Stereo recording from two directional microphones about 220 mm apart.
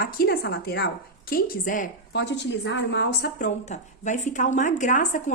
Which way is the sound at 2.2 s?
55° left (ahead or behind).